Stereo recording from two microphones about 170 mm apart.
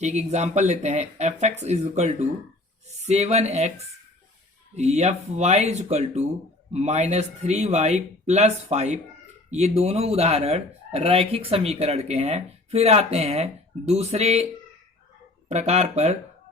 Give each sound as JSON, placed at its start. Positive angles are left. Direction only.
{"t": 0.0, "sound": "speech", "side_deg": -40}
{"t": 15.4, "sound": "speech", "side_deg": -40}